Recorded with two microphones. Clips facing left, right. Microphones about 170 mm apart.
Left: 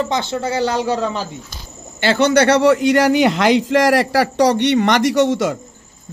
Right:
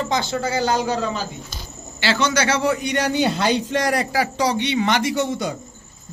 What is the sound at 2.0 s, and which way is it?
A man's voice, 55° left (ahead or behind).